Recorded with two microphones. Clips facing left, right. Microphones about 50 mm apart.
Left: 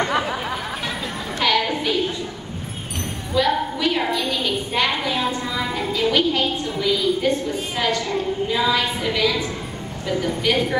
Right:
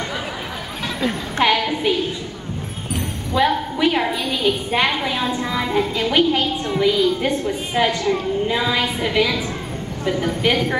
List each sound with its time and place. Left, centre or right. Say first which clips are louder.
1.4 s a woman's voice: right 2 dB; right
3.3 s a woman's voice: right 2 dB; right